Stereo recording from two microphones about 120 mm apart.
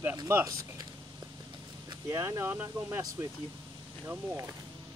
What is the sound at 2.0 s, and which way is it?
Speech, 25° right (ahead or behind).